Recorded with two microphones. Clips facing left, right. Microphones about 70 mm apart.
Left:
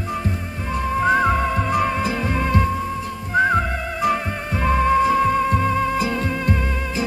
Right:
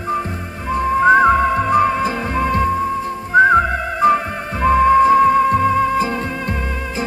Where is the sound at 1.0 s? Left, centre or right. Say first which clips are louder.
Right 7 dB; right.